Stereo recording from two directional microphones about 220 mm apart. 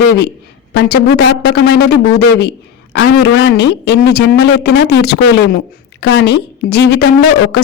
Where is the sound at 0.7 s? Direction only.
50° left (ahead or behind).